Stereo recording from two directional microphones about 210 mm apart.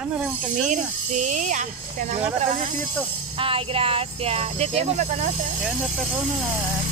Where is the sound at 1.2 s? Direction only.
35° right (ahead or behind).